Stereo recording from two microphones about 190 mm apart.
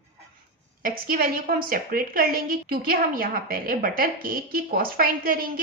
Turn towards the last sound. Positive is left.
turn(degrees=-50)  # may be behind; listen again after turning